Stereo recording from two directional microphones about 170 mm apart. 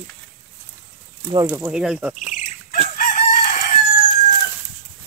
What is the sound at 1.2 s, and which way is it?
Speech, 25° right (ahead or behind).